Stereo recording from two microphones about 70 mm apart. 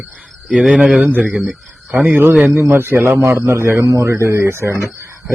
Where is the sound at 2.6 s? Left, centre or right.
Right.